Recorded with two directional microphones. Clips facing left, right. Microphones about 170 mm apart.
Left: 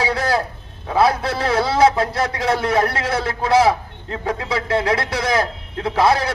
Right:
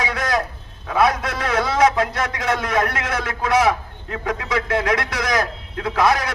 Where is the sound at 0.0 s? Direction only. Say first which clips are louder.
Left 3 dB; 30° left (ahead or behind).